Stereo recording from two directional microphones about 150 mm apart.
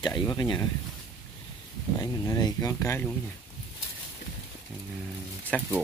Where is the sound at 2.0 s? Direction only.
25° left (ahead or behind).